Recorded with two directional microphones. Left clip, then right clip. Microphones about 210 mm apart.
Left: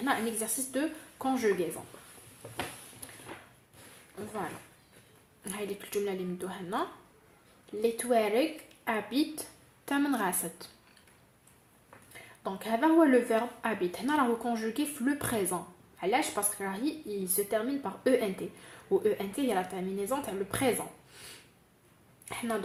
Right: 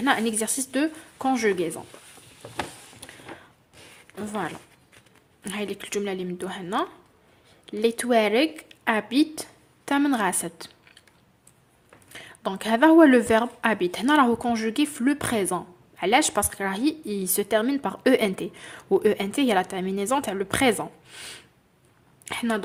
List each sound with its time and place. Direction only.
0.0 s a woman's voice: 35° right (ahead or behind)
5.4 s speech: 30° right (ahead or behind)
12.1 s a woman's voice: 35° right (ahead or behind)
22.3 s speech: 35° right (ahead or behind)